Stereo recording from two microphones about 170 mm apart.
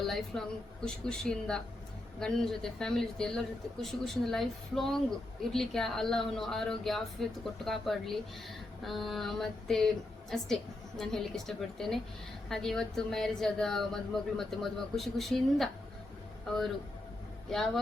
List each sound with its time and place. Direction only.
0.0 s a woman's voice: centre (ahead or behind)